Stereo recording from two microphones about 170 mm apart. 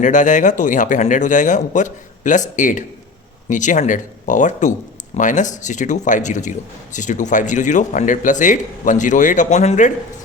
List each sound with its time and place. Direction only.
0.0 s a man's voice: 50° left (ahead or behind)